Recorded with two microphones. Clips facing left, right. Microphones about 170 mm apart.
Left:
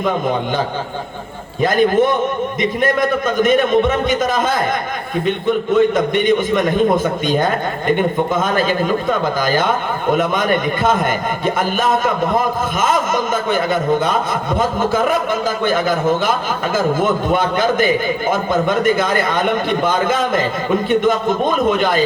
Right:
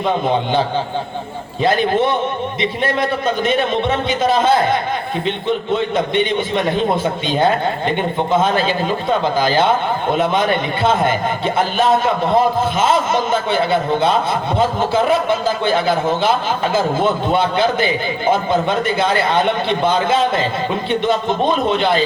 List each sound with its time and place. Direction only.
1.6 s a man's voice: 45° left (ahead or behind)